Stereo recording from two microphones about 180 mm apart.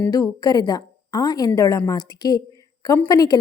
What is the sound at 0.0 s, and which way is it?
A woman's voice, 20° left (ahead or behind).